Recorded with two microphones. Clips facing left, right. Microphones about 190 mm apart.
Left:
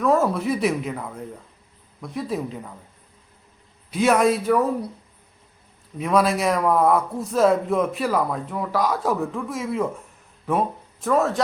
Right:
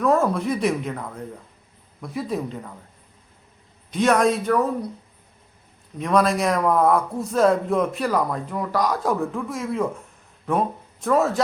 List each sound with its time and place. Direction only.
0.0 s a man's voice: centre (ahead or behind)
3.9 s a man's voice: 5° left (ahead or behind)
6.0 s a man's voice: 5° left (ahead or behind)